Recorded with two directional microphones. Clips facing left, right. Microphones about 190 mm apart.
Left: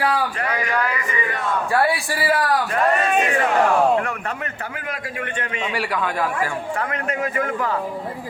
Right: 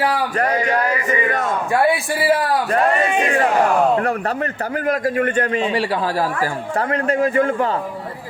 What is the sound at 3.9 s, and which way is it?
A man's voice, 35° right (ahead or behind).